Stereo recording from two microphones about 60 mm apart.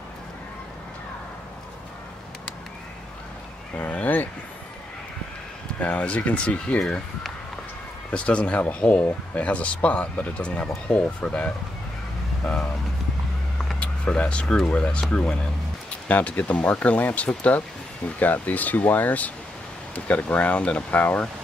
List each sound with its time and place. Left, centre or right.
3.7 s speech: left
5.8 s speech: left
8.1 s speech: centre
13.7 s speech: centre